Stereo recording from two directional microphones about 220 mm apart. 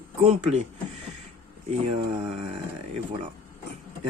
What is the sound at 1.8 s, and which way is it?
Speech, 30° right (ahead or behind).